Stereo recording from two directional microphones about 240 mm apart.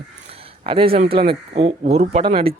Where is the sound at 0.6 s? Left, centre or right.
Right.